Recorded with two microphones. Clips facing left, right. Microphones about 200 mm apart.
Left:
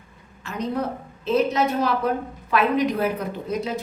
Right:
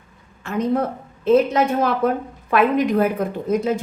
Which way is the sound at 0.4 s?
50° right (ahead or behind).